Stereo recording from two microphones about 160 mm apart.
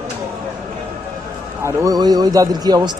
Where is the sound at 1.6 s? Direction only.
20° right (ahead or behind).